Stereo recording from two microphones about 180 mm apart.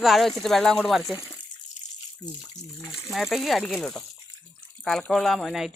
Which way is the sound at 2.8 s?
15° left (ahead or behind).